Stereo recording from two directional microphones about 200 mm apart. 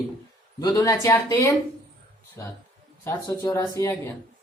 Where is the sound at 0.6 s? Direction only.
20° left (ahead or behind).